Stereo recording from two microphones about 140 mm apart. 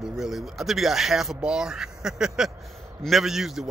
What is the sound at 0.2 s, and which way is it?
A man's voice, centre (ahead or behind).